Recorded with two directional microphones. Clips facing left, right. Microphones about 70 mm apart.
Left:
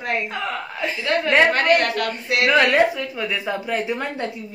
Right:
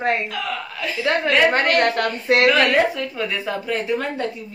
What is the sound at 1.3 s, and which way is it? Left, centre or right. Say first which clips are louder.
Speech: left 1 dB; left.